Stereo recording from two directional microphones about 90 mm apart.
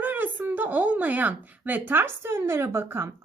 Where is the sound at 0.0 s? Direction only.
20° right (ahead or behind).